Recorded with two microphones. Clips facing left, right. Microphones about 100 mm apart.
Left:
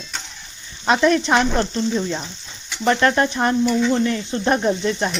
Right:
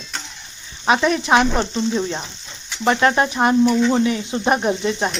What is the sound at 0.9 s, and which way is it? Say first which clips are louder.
Speech: even; 5° right (ahead or behind).